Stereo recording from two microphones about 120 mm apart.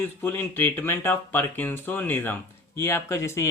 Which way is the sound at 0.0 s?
15° left (ahead or behind).